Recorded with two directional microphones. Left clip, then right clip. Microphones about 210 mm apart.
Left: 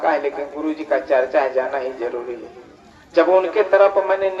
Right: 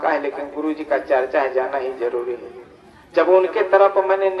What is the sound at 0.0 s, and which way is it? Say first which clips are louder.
A man's voice: left 1 dB; 25° right (ahead or behind).